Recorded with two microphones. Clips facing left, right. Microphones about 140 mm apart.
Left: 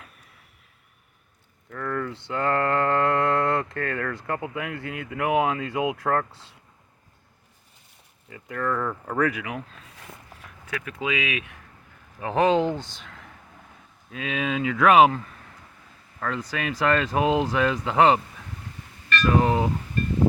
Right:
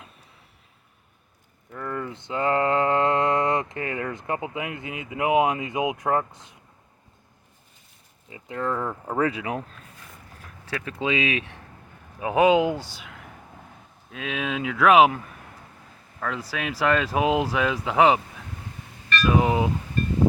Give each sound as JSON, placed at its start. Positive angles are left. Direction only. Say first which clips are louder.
{"t": 1.7, "sound": "mantra", "louder": "left 2 dB", "side_deg": -15}
{"t": 8.3, "sound": "speech", "louder": "even", "side_deg": -20}
{"t": 10.7, "sound": "speech", "louder": "right 2 dB", "side_deg": -30}
{"t": 12.2, "sound": "speech", "louder": "right 2 dB", "side_deg": -10}
{"t": 16.2, "sound": "speech", "louder": "left 1 dB", "side_deg": -5}
{"t": 19.2, "sound": "speech", "louder": "even", "side_deg": -5}